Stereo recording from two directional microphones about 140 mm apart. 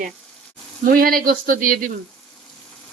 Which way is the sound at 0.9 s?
90° right.